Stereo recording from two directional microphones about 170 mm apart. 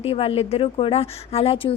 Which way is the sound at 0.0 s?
35° left (ahead or behind).